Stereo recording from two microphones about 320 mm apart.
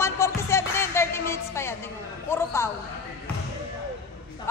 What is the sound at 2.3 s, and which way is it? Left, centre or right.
Music, centre.